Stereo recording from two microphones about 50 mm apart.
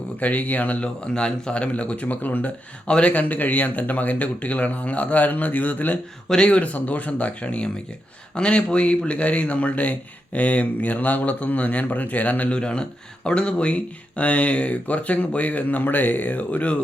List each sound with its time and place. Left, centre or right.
0.2 s speech: left
1.1 s speech: centre; by 2.5 s left
2.8 s speech: left
3.1 s speech: left
6.2 s speech: centre
12.5 s speech: centre